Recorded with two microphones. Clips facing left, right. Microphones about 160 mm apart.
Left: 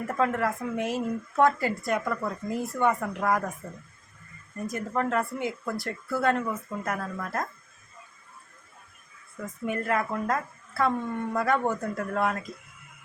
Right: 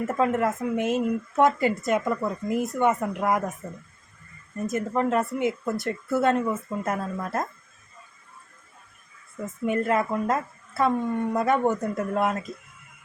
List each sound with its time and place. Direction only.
0.0 s speech: 20° right (ahead or behind)
4.5 s speech: 20° right (ahead or behind)
9.6 s speech: 25° right (ahead or behind)